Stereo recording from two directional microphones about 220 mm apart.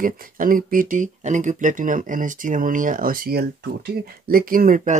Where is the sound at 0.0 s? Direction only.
40° right (ahead or behind).